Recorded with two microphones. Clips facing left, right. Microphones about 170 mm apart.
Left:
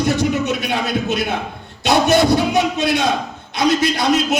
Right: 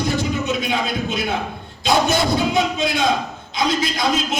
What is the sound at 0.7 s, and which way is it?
Speech, 65° left (ahead or behind).